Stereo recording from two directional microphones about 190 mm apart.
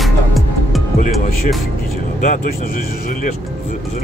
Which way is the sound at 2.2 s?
40° left (ahead or behind).